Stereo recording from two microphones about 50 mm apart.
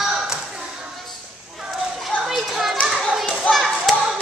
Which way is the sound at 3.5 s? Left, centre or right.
Centre.